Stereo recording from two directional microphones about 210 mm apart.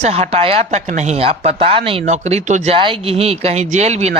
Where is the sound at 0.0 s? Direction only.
30° right (ahead or behind).